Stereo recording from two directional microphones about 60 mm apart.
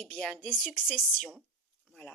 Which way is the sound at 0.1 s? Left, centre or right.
Centre.